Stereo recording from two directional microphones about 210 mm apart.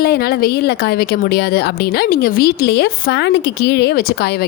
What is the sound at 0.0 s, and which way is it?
A woman's voice, 50° left (ahead or behind).